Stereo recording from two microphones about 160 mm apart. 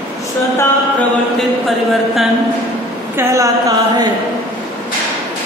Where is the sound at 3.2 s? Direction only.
20° right (ahead or behind).